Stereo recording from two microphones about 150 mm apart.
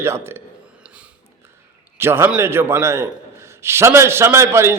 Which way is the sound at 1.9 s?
15° right (ahead or behind).